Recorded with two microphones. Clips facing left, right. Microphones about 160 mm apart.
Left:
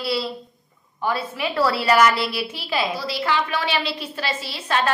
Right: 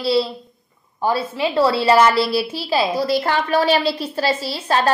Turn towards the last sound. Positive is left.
turn(degrees=-35)  # may be behind; listen again after turning